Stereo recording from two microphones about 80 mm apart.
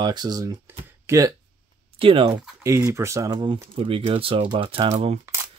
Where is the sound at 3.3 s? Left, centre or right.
Right.